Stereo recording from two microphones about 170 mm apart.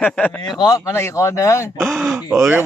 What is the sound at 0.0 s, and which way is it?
Speech, 10° left (ahead or behind).